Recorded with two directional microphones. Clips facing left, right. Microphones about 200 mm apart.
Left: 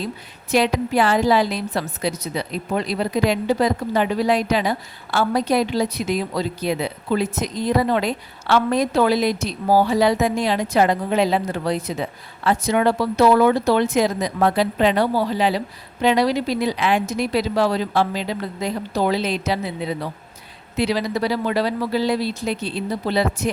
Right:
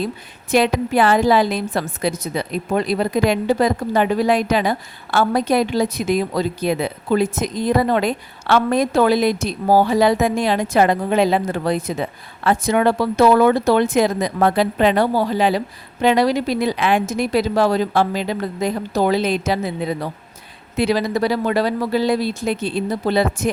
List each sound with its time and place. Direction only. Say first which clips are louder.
0.5 s a woman's voice: right 2 dB; 55° right (ahead or behind)